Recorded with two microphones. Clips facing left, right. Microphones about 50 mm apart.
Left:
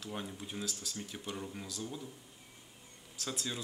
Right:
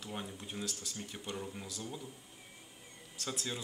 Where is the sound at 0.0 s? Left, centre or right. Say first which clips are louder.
Left 1 dB; centre.